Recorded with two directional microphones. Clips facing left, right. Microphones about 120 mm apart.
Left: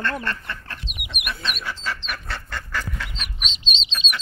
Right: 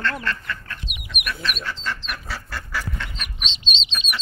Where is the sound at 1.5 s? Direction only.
5° left (ahead or behind).